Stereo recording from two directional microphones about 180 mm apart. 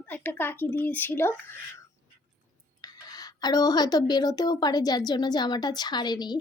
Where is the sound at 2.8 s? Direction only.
20° left (ahead or behind).